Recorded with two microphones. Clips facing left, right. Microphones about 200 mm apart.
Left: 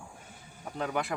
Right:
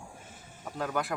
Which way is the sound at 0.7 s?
Centre (ahead or behind).